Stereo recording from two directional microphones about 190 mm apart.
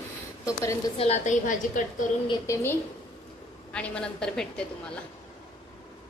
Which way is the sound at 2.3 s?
15° left (ahead or behind).